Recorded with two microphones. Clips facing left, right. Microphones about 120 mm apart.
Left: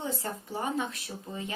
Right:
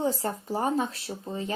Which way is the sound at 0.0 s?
35° right (ahead or behind).